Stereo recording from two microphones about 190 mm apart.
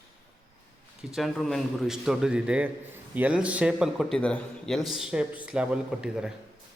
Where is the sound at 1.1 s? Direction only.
Centre (ahead or behind).